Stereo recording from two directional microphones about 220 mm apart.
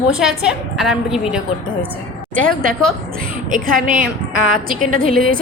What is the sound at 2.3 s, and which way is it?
A woman's voice, 40° right (ahead or behind).